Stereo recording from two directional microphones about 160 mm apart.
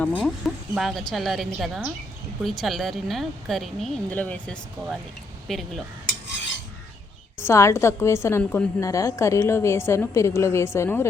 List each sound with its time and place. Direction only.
0.7 s speech: centre (ahead or behind)
7.3 s a woman's voice: 15° left (ahead or behind)